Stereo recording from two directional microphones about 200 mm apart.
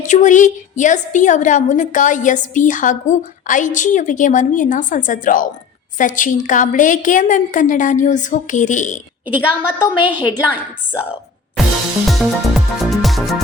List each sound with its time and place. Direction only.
0.0 s a woman's voice: 40° left (ahead or behind)
9.2 s a woman's voice: 5° right (ahead or behind)
12.0 s music: centre (ahead or behind)